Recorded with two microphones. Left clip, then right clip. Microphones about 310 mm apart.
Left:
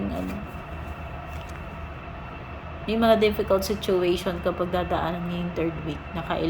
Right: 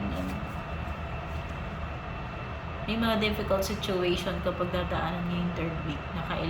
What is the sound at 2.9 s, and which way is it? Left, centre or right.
Speech, centre.